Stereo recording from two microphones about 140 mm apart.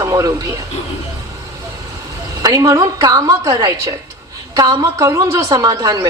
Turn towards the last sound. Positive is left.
turn(degrees=-25)  # may be behind; listen again after turning